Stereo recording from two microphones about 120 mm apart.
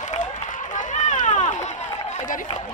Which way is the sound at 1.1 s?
70° left (ahead or behind).